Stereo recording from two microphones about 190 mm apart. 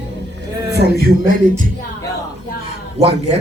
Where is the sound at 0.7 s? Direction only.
55° right (ahead or behind).